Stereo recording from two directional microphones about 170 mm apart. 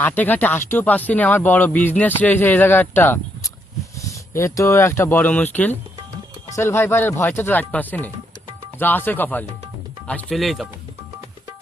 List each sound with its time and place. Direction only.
0.0 s speech: 10° left (ahead or behind)